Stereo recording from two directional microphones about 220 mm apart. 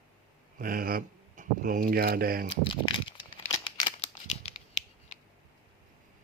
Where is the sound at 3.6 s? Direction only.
25° left (ahead or behind).